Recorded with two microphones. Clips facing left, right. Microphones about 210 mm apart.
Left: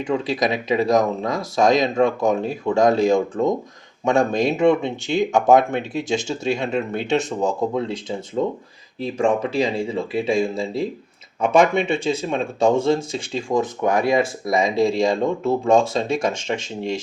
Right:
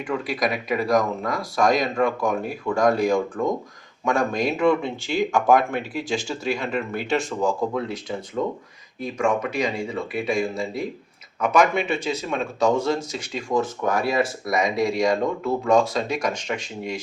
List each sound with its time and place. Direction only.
0.1 s speech: 25° left (ahead or behind)